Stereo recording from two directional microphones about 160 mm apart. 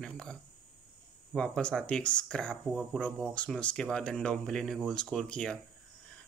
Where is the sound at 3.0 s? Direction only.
5° left (ahead or behind).